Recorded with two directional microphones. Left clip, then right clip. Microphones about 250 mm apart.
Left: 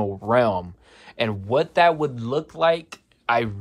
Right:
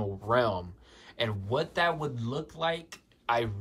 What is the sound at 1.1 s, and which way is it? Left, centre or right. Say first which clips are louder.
Speech: left 7 dB; right.